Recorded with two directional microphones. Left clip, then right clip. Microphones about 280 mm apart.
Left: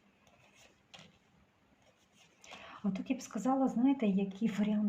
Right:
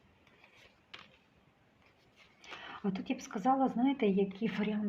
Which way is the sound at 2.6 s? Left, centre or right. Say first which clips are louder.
Right 1 dB; right.